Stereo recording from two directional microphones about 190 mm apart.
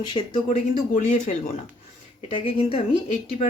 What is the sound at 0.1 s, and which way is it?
Speech, 25° left (ahead or behind).